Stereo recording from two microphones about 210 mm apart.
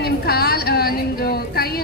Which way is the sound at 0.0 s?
50° left (ahead or behind).